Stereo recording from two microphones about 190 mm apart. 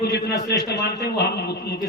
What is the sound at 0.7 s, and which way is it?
A man's voice, 60° left (ahead or behind).